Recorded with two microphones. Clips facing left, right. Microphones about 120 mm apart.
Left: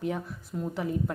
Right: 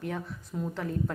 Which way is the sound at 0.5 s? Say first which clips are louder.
Left 1 dB; centre (ahead or behind).